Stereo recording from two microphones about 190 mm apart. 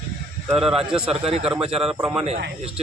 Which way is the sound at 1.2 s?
30° right (ahead or behind).